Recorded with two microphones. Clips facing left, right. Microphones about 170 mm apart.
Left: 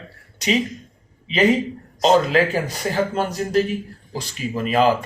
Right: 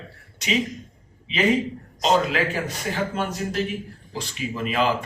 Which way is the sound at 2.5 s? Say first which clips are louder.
Left 5 dB; 40° left (ahead or behind).